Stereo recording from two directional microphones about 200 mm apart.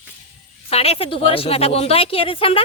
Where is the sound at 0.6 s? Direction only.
30° left (ahead or behind).